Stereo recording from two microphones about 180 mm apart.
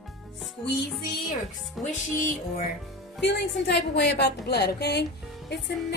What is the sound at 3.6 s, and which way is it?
Music, 70° left (ahead or behind).